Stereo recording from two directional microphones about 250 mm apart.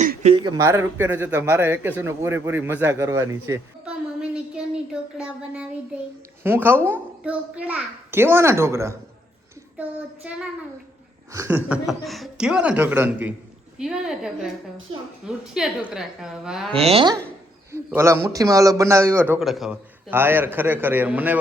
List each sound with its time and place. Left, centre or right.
0.0 s a man's voice: right; by 9.0 s centre
11.3 s speech: centre
15.5 s speech: centre
16.7 s speech: right
17.7 s a man's voice: centre